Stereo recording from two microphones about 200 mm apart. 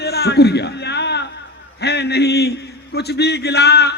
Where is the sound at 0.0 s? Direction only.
55° left (ahead or behind).